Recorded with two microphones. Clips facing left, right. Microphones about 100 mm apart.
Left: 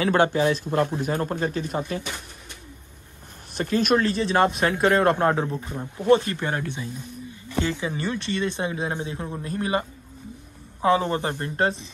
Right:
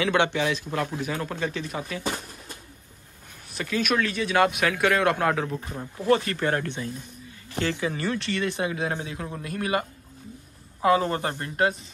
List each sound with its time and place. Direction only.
0.0 s a man's voice: 40° left (ahead or behind)
3.5 s a man's voice: 40° left (ahead or behind)